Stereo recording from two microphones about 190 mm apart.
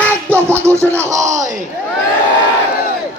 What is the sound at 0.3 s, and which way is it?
Music, 10° right (ahead or behind).